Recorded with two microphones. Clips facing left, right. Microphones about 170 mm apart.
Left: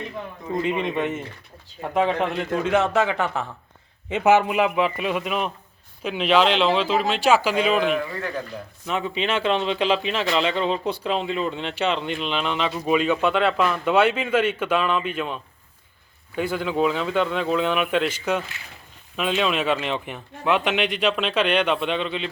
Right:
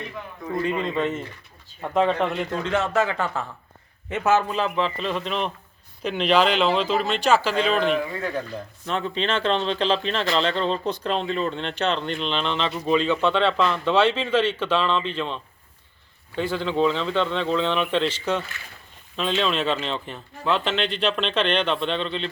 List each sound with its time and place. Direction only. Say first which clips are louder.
0.4 s speech: left 1 dB; 20° left (ahead or behind)